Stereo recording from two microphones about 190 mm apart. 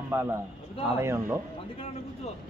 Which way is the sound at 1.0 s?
15° right (ahead or behind).